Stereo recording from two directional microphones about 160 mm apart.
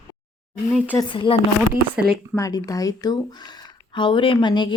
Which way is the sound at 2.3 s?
20° left (ahead or behind).